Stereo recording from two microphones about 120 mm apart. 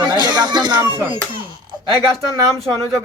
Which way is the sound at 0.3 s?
35° right (ahead or behind).